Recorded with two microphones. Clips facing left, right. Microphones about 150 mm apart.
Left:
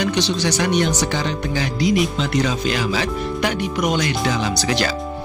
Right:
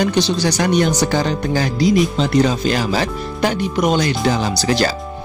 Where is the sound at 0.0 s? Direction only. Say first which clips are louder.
Right 3 dB; 35° right (ahead or behind).